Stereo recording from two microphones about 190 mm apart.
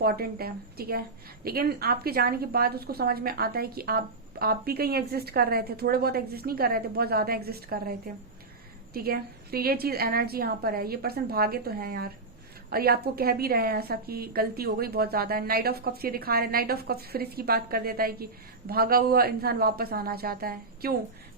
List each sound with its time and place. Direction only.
0.0 s a woman's voice: 55° right (ahead or behind)